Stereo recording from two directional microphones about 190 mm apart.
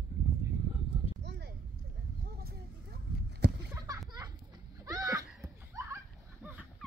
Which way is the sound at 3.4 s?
60° right (ahead or behind).